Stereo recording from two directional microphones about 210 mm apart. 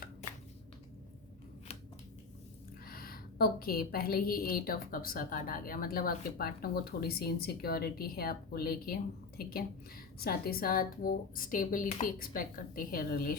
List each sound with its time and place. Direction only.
2.8 s a woman's voice: 45° left (ahead or behind)